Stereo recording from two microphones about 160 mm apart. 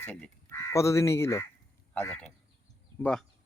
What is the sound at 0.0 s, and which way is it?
A man's voice, 15° left (ahead or behind).